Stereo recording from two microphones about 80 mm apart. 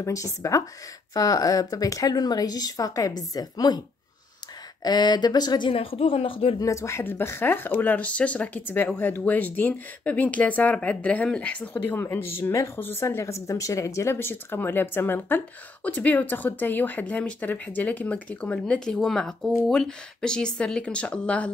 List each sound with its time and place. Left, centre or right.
0.0 s speech: left
4.8 s speech: left
6.6 s a woman's voice: left; by 21.5 s centre